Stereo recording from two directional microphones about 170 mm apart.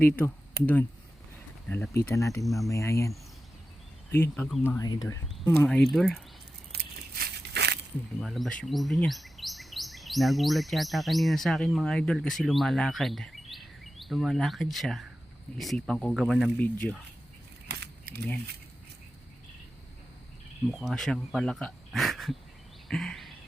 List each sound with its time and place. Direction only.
0.6 s speech: 10° left (ahead or behind)
2.4 s speech: centre (ahead or behind)
2.6 s speech: 20° left (ahead or behind)
4.1 s speech: 15° left (ahead or behind)
5.6 s speech: 5° left (ahead or behind)
6.7 s a sound: 70° right (ahead or behind)
8.2 s speech: centre (ahead or behind)
17.7 s keys jangling: 70° right (ahead or behind)
20.7 s speech: centre (ahead or behind)
22.9 s a sound: centre (ahead or behind)